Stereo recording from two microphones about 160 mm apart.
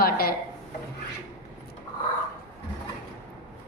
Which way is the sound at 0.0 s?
70° left (ahead or behind).